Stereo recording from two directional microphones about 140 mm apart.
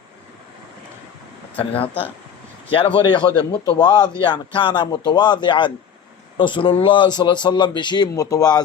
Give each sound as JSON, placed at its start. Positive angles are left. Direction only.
{"t": 1.5, "sound": "a man's voice", "side_deg": 40}